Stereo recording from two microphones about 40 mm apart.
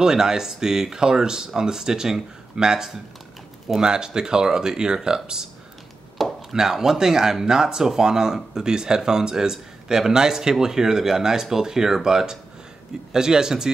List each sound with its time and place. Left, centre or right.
0.0 s speech: centre
6.2 s chopping: centre
6.5 s speech: centre